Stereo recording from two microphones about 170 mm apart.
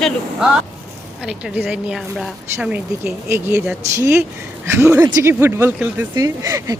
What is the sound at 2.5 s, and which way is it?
Speech, 10° right (ahead or behind).